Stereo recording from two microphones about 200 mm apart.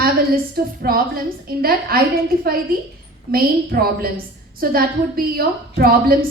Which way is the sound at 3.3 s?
50° right (ahead or behind).